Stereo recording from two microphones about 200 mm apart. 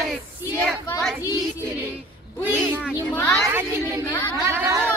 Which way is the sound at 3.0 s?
10° left (ahead or behind).